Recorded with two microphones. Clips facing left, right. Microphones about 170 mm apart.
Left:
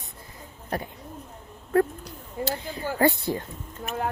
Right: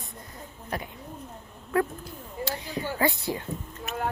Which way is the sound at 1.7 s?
40° left (ahead or behind).